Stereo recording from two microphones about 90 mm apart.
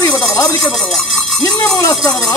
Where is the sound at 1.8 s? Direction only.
35° left (ahead or behind).